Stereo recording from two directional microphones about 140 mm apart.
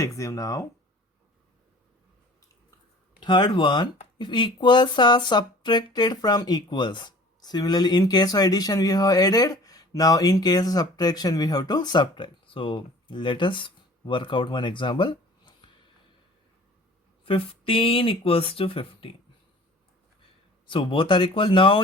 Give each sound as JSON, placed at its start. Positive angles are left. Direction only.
{"t": 0.0, "sound": "speech", "side_deg": 25}
{"t": 3.2, "sound": "speech", "side_deg": 35}
{"t": 17.2, "sound": "speech", "side_deg": 40}
{"t": 20.7, "sound": "speech", "side_deg": 35}